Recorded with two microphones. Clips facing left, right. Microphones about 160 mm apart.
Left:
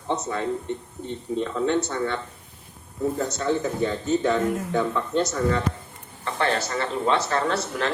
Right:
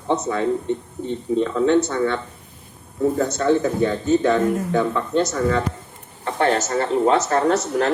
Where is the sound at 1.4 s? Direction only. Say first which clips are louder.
Right 6 dB; 80° right.